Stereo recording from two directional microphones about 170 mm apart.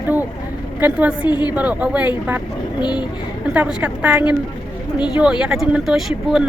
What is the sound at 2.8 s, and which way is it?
Speech, 25° left (ahead or behind).